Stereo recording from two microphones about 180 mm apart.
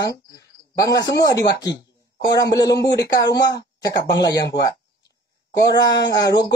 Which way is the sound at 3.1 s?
20° left (ahead or behind).